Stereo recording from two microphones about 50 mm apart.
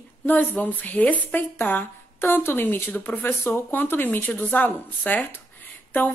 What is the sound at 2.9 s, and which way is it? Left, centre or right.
A woman's voice, left.